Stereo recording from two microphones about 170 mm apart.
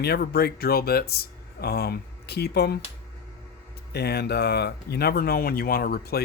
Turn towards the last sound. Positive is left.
turn(degrees=65)  # may be behind; listen again after turning